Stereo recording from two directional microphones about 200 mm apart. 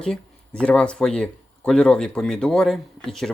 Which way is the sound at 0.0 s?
5° left (ahead or behind).